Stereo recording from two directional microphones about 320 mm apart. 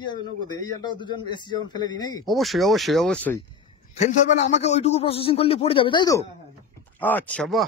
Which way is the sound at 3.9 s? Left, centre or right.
Left.